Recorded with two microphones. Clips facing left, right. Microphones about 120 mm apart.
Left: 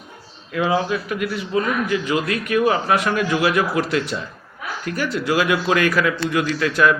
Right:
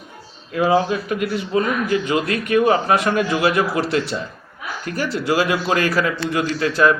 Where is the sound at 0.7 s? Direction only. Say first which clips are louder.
Right 4 dB; 40° right (ahead or behind).